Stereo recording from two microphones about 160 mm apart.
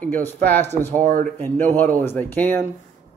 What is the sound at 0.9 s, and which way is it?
Speech, 55° right (ahead or behind).